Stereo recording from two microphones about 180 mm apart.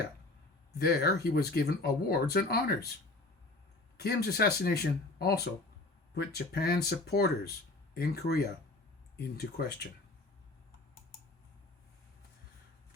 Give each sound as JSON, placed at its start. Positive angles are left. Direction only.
{"t": 0.8, "sound": "speech", "side_deg": 60}
{"t": 3.9, "sound": "speech", "side_deg": 60}